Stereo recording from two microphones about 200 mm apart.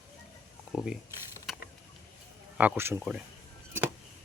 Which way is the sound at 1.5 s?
Centre (ahead or behind).